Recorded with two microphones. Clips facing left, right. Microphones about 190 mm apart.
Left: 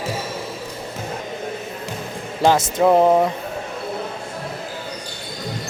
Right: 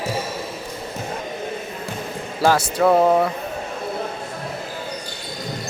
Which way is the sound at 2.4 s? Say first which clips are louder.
Left 1 dB; 20° left (ahead or behind).